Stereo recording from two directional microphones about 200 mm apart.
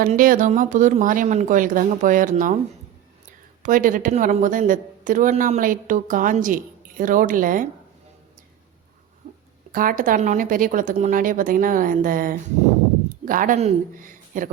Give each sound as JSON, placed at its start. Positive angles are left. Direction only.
{"t": 0.0, "sound": "speech", "side_deg": -45}
{"t": 9.2, "sound": "a sound", "side_deg": -45}
{"t": 9.7, "sound": "speech", "side_deg": -45}